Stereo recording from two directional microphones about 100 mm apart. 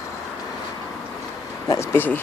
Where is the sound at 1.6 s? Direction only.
30° left (ahead or behind).